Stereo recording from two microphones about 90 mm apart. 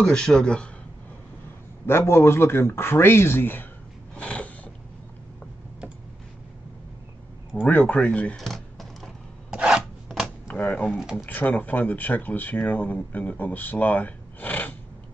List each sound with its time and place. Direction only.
0.0 s speech: 10° left (ahead or behind)
1.9 s speech: 30° left (ahead or behind)
4.1 s a sound: 15° left (ahead or behind)
7.6 s speech: 15° left (ahead or behind)
8.4 s a sound: centre (ahead or behind)
9.5 s filing: 10° right (ahead or behind)
10.5 s speech: 15° left (ahead or behind)
11.0 s speech: 5° right (ahead or behind)
11.2 s speech: 20° left (ahead or behind)